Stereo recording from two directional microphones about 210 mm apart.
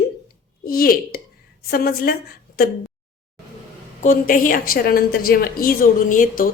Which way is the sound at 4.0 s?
40° left (ahead or behind).